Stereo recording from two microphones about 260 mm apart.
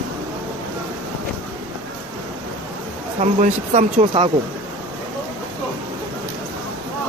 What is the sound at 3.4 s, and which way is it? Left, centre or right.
Speech, right.